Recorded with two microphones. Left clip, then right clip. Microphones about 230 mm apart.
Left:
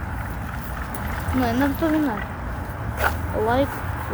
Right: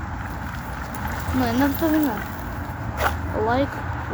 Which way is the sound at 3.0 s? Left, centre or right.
Centre.